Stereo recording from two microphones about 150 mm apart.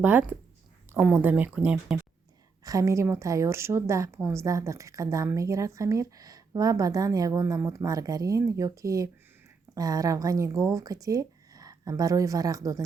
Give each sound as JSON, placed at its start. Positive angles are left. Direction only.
{"t": 0.0, "sound": "speech", "side_deg": -10}
{"t": 2.6, "sound": "a woman's voice", "side_deg": -20}